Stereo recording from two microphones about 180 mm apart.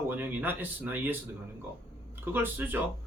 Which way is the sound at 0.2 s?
10° right (ahead or behind).